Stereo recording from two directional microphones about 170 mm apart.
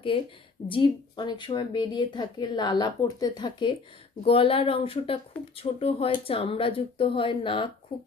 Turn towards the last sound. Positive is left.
turn(degrees=30)  # may be behind; listen again after turning